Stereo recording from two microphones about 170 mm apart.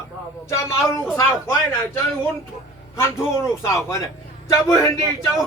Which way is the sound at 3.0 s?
15° left (ahead or behind).